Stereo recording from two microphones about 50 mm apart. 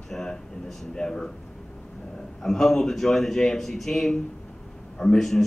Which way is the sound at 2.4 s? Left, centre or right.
Centre.